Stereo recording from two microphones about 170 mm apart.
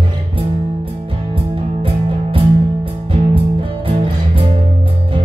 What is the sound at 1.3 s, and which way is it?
Music, 30° right (ahead or behind).